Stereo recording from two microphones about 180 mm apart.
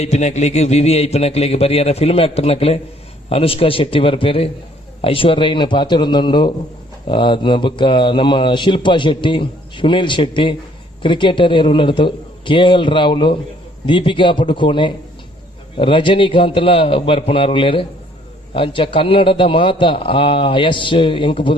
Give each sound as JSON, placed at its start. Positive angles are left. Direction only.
{"t": 0.0, "sound": "speech", "side_deg": 40}